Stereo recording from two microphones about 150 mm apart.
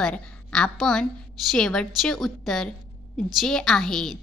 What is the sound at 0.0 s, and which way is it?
A woman's voice, 5° left (ahead or behind).